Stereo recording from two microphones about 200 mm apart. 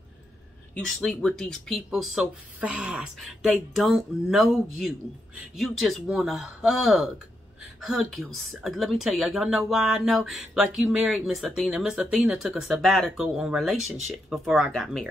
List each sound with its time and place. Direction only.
0.7 s speech: centre (ahead or behind)